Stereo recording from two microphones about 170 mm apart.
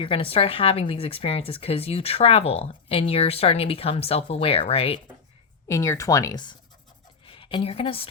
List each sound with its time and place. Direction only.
0.0 s speech: 35° left (ahead or behind)
5.6 s a woman's voice: 20° left (ahead or behind); by 8.0 s 35° left (ahead or behind)